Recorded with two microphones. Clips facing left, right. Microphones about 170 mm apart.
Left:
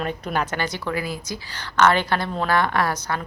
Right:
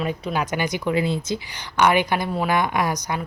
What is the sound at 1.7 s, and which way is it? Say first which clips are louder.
A woman's voice: even; 15° right (ahead or behind).